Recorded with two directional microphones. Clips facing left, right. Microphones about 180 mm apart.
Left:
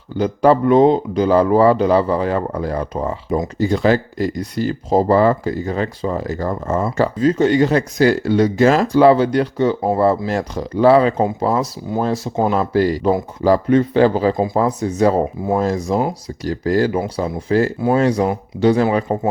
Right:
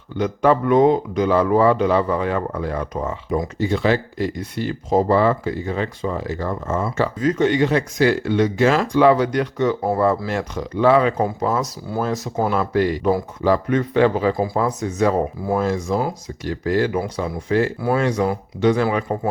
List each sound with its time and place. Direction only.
0.2 s speech: 35° left (ahead or behind)
3.6 s speech: 40° left (ahead or behind)
11.2 s speech: 20° left (ahead or behind)
11.4 s speech: 35° left (ahead or behind)
17.7 s speech: 20° left (ahead or behind)
18.0 s speech: 35° left (ahead or behind)